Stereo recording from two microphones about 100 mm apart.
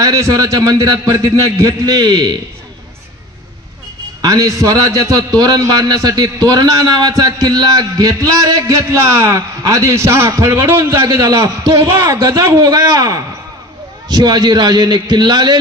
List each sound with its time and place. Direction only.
0.0 s a man's voice: 35° right (ahead or behind)
4.2 s a man's voice: 35° right (ahead or behind)